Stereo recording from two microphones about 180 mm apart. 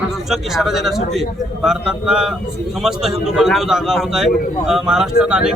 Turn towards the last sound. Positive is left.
turn(degrees=-5)  # may be behind; listen again after turning